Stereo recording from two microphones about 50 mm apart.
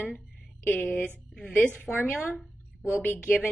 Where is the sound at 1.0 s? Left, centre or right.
Left.